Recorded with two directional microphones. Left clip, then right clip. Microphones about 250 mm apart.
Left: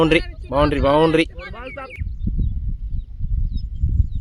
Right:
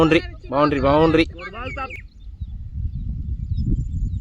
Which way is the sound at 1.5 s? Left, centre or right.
Right.